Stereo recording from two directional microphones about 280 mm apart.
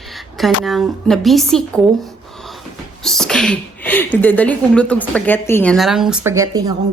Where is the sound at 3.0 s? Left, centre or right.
Centre.